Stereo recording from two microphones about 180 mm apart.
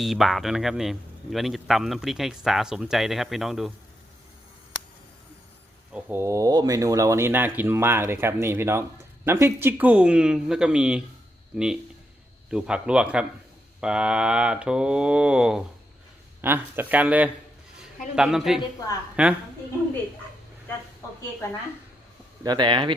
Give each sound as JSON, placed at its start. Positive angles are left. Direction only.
{"t": 0.0, "sound": "speech", "side_deg": 0}
{"t": 5.9, "sound": "a woman's voice", "side_deg": -10}
{"t": 22.4, "sound": "speech", "side_deg": -25}